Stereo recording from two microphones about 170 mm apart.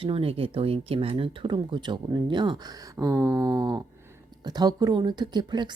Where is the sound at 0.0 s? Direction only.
35° right (ahead or behind).